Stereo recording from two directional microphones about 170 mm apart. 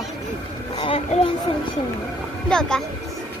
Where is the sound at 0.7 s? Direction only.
35° left (ahead or behind).